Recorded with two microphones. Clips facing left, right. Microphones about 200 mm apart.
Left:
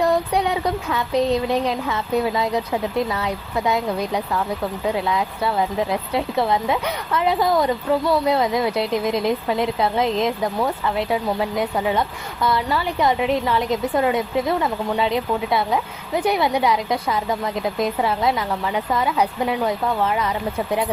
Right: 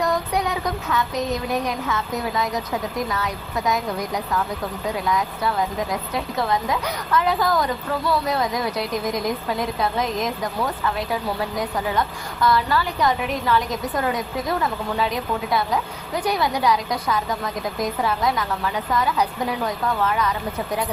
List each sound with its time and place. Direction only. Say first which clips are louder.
0.0 s speech: left 3 dB; 30° left (ahead or behind)